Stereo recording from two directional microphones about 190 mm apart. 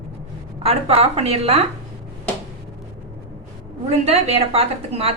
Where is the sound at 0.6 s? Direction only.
30° right (ahead or behind).